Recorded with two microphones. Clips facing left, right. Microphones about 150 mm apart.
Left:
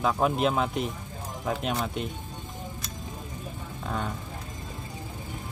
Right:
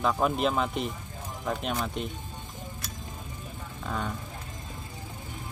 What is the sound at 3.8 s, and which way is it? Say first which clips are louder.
Speech: left 1 dB; 5° left (ahead or behind).